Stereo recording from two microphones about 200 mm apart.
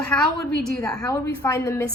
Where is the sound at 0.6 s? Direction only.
5° left (ahead or behind).